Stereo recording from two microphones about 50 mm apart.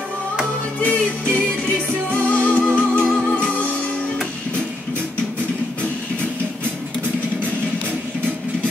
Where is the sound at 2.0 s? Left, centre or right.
Left.